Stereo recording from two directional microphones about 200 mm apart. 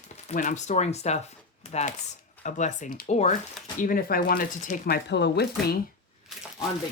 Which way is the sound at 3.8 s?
45° left (ahead or behind).